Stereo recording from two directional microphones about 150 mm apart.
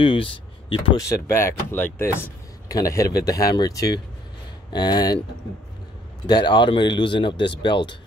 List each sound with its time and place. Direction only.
0.0 s speech: 35° left (ahead or behind)
0.9 s speech: 20° left (ahead or behind)
6.2 s speech: 30° left (ahead or behind)